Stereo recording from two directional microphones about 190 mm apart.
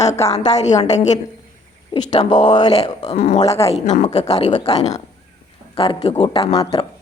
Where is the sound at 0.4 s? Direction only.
35° left (ahead or behind).